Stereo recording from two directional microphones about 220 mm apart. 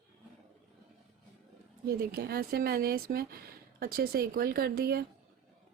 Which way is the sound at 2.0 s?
45° right (ahead or behind).